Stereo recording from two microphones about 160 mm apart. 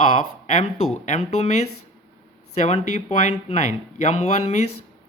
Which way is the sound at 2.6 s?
45° left (ahead or behind).